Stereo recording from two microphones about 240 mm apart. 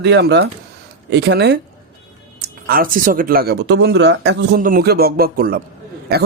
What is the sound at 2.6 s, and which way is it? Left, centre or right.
Speech, right.